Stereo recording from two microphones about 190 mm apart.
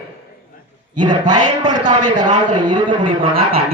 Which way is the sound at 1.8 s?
40° right (ahead or behind).